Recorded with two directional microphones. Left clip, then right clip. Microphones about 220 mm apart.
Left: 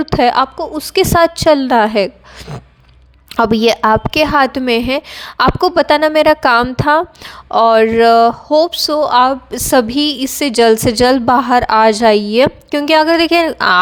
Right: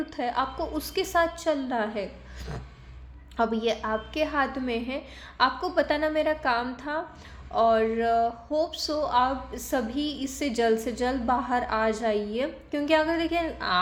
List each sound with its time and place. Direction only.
0.0 s a woman's voice: 50° left (ahead or behind)
3.3 s a woman's voice: 50° left (ahead or behind)